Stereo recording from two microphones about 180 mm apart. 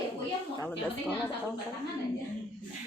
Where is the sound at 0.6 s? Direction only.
5° left (ahead or behind).